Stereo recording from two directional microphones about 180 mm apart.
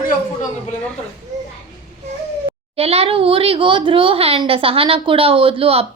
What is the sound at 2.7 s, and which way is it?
Speech, 35° right (ahead or behind).